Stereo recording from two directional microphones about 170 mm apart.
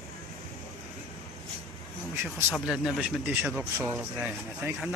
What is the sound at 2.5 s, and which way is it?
Speech, 5° right (ahead or behind).